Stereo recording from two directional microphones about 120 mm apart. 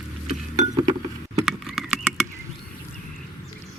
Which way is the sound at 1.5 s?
Centre (ahead or behind).